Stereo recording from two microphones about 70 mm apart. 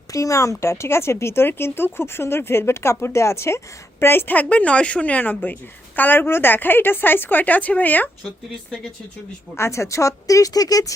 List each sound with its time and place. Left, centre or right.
0.1 s a woman's voice: left
9.6 s speech: left